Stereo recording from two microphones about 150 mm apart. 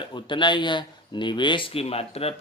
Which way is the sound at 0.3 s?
30° left (ahead or behind).